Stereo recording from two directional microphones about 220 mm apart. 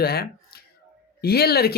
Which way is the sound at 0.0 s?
45° left (ahead or behind).